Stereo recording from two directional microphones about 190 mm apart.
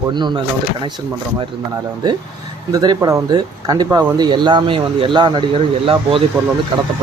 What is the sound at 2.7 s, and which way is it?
Speech, 20° right (ahead or behind).